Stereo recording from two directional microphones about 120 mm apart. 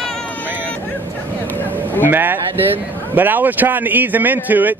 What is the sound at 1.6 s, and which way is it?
Music, 15° right (ahead or behind).